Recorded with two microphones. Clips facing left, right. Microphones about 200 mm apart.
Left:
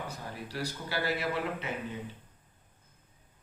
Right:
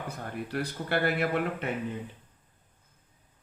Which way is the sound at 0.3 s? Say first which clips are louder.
Right 6 dB; 55° right (ahead or behind).